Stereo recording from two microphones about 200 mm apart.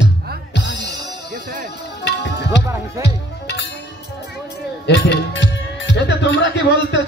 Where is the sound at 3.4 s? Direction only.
60° left (ahead or behind).